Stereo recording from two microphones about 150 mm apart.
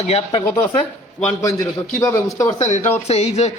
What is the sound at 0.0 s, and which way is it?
Speech, 40° left (ahead or behind).